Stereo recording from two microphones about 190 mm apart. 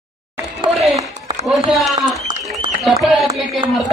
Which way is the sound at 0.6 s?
35° right (ahead or behind).